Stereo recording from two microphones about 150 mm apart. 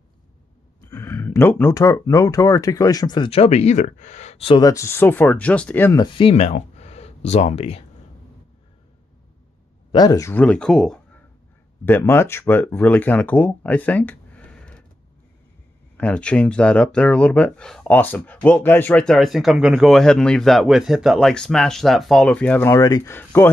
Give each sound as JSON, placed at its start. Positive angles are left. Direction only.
{"t": 0.8, "sound": "speech", "side_deg": 20}
{"t": 3.3, "sound": "speech", "side_deg": 45}
{"t": 4.6, "sound": "speech", "side_deg": 20}
{"t": 5.9, "sound": "speech", "side_deg": 35}
{"t": 9.9, "sound": "speech", "side_deg": 25}
{"t": 10.4, "sound": "speech", "side_deg": 5}
{"t": 11.8, "sound": "speech", "side_deg": 15}
{"t": 16.0, "sound": "speech", "side_deg": 10}
{"t": 22.8, "sound": "speech", "side_deg": 20}